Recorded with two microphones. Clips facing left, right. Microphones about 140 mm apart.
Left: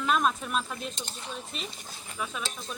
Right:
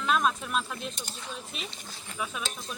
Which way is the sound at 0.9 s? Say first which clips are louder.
Left 1 dB; 25° left (ahead or behind).